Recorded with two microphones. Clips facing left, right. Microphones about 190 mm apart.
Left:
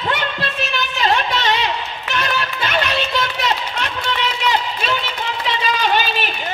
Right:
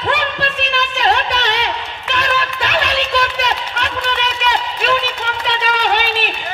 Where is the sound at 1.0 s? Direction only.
70° right (ahead or behind).